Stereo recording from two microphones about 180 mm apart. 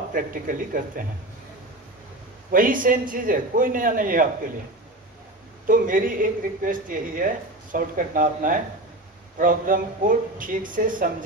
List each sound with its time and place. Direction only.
0.1 s a man's voice: 50° right (ahead or behind)
2.5 s a man's voice: 50° right (ahead or behind)
5.7 s a man's voice: 50° right (ahead or behind)